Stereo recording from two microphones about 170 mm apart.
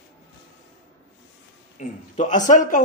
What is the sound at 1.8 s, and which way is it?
Speech, 45° left (ahead or behind).